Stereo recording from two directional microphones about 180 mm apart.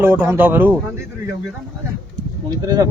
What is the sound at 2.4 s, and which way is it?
Speech, 20° right (ahead or behind).